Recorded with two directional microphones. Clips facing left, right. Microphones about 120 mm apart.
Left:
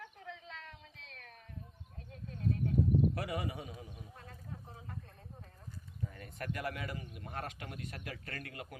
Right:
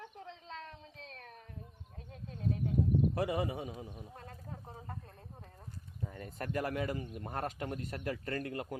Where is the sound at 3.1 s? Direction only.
25° right (ahead or behind).